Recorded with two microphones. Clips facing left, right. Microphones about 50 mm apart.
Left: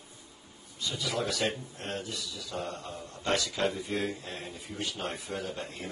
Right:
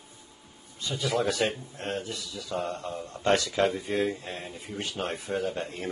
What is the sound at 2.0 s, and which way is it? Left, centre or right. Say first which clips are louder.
A man's voice: right 3 dB; right.